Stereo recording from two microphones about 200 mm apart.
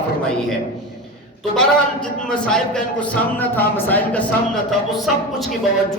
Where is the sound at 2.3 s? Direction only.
5° left (ahead or behind).